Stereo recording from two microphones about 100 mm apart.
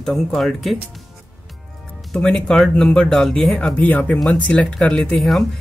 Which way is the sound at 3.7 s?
15° left (ahead or behind).